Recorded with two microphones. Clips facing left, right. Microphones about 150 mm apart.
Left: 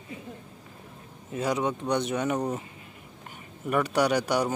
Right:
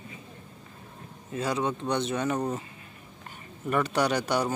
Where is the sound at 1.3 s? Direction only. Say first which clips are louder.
Left 1 dB; 15° left (ahead or behind).